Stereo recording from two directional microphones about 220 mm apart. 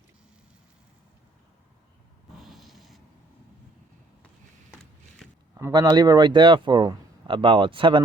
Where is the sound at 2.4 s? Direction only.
Centre (ahead or behind).